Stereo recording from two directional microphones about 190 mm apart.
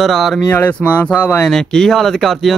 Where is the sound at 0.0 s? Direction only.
Centre (ahead or behind).